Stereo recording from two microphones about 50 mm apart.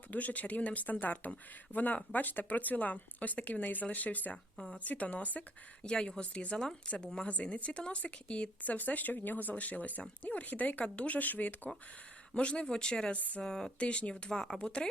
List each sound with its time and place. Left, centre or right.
0.1 s speech: left
4.5 s speech: centre
4.9 s speech: left
5.8 s a woman's voice: centre; by 11.7 s left
12.3 s a woman's voice: left
13.1 s speech: left
13.4 s speech: centre
13.7 s a woman's voice: left
14.6 s a woman's voice: left